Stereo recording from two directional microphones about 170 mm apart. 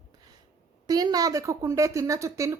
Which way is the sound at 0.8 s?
20° right (ahead or behind).